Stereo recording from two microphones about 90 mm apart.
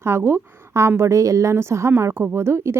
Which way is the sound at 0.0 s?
25° right (ahead or behind).